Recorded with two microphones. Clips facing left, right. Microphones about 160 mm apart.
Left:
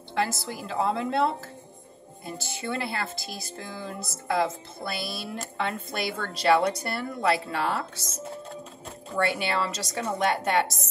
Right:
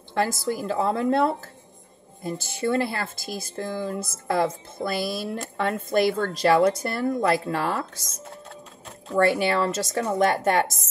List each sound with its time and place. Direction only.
0.1 s a woman's voice: 45° right (ahead or behind)
9.2 s a woman's voice: 45° right (ahead or behind)